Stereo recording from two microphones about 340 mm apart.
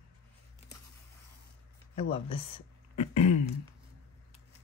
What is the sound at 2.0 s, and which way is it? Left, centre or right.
Speech, centre.